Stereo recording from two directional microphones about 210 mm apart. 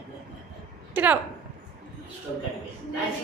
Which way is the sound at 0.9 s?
5° right (ahead or behind).